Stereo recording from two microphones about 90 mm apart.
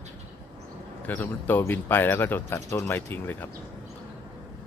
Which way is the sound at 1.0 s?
20° left (ahead or behind).